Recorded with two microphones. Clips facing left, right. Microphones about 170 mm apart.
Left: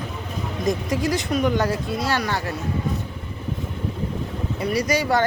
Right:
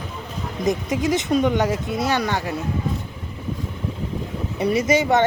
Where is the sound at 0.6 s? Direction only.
20° right (ahead or behind).